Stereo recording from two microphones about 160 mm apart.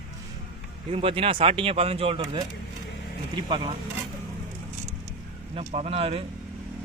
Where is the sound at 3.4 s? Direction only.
30° right (ahead or behind).